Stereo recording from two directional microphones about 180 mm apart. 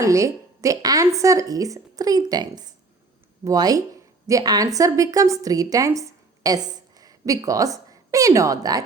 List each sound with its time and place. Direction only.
0.0 s a woman's voice: 15° right (ahead or behind)